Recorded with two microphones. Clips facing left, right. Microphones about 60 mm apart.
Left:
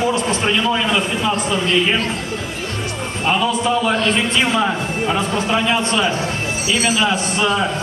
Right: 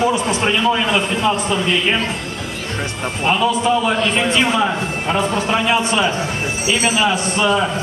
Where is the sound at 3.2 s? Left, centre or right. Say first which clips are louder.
Right 2 dB; centre.